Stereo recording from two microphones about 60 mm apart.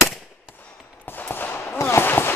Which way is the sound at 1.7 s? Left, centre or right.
Left.